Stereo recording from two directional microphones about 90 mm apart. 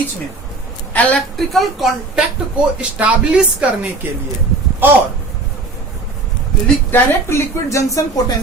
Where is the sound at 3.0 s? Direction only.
15° right (ahead or behind).